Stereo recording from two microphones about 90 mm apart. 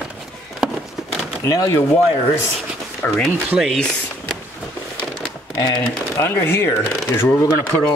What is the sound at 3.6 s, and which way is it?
Speech, 5° left (ahead or behind).